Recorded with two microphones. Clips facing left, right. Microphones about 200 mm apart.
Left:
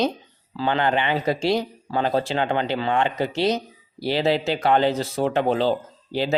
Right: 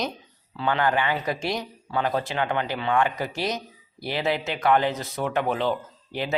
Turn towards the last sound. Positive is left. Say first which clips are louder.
# left 5 dB
turn(degrees=30)  # may be behind; listen again after turning